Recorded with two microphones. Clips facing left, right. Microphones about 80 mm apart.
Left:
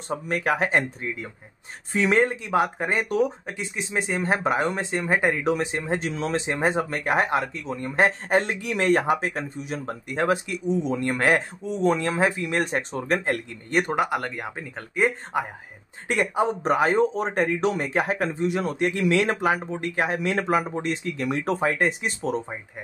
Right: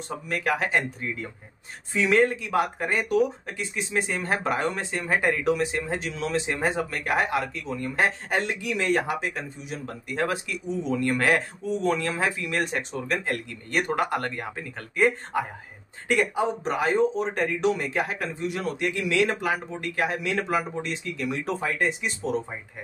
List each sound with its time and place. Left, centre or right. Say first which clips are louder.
0.3 s speech: left 2 dB; left
2.0 s speech: even; left
10.0 s speech: left 4 dB; left
13.7 s speech: left 2 dB; left
13.9 s speech: left 1 dB; centre
16.1 s speech: left 1 dB; left
16.9 s speech: left 1 dB; left
17.3 s speech: left 1 dB; left